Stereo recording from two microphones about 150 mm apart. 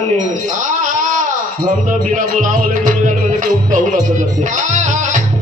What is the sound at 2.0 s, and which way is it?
Music, 55° right (ahead or behind).